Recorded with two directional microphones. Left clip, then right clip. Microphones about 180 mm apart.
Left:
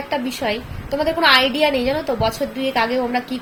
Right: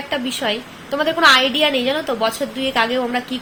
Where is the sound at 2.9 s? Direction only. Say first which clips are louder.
Even; centre (ahead or behind).